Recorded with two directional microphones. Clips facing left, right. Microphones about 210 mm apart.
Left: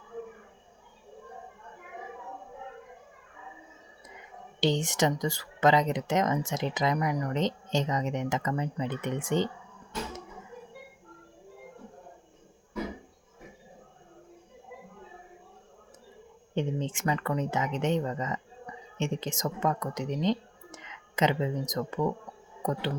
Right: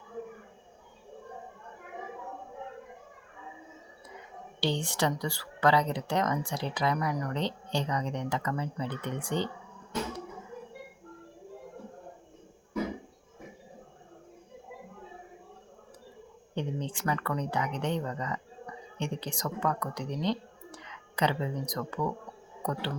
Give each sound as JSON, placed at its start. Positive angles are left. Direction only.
{"t": 4.6, "sound": "speech", "side_deg": 20}
{"t": 16.6, "sound": "speech", "side_deg": 20}